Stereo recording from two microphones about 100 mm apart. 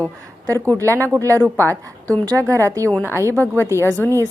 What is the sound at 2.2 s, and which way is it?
Speech, 30° right (ahead or behind).